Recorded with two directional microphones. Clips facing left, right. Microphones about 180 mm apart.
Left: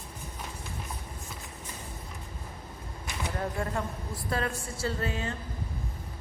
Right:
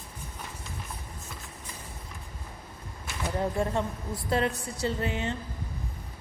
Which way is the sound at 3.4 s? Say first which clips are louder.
Right 5 dB; 25° right (ahead or behind).